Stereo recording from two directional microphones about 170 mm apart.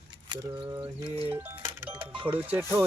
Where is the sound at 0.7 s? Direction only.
30° right (ahead or behind).